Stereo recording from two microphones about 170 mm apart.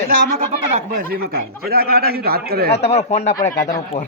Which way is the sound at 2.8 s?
40° left (ahead or behind).